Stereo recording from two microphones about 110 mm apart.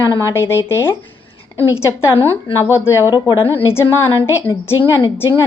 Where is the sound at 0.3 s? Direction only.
25° left (ahead or behind).